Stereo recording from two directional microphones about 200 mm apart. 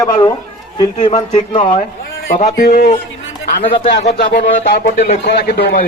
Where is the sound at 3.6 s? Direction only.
25° left (ahead or behind).